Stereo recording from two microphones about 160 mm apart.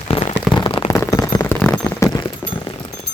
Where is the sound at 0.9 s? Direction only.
20° left (ahead or behind).